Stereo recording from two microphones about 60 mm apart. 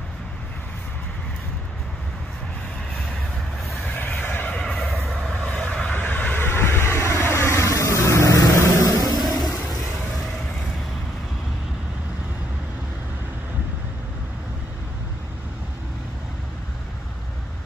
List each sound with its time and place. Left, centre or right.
4.2 s neigh: left
4.6 s neigh: centre
4.8 s a sound: centre
5.3 s vehicle: centre
6.4 s vehicle: left
9.2 s vehicle: centre